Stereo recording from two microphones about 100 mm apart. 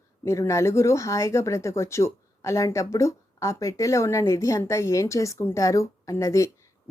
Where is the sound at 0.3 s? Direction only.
30° left (ahead or behind).